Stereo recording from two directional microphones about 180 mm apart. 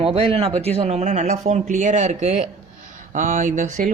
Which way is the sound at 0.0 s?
30° right (ahead or behind).